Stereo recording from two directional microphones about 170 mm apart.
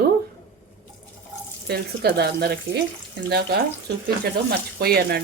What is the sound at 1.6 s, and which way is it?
Speech, 70° right (ahead or behind).